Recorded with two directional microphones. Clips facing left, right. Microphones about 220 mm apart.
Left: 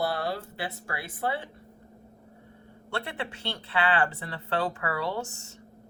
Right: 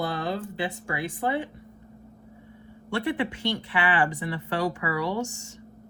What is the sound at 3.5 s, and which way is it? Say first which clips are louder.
Speech: left 1 dB; 15° right (ahead or behind).